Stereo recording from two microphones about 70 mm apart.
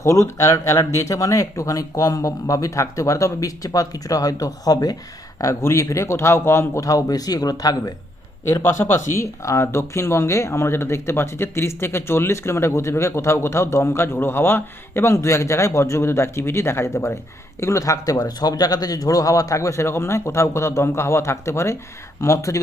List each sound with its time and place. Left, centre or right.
0.0 s speech: left
5.4 s speech: left
6.8 s speech: left
8.6 s a man's voice: left